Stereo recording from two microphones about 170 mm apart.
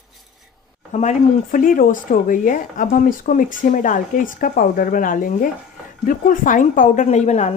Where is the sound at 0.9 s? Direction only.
45° left (ahead or behind).